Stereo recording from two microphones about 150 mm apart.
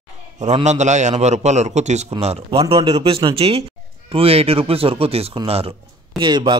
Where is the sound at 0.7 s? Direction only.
50° right (ahead or behind).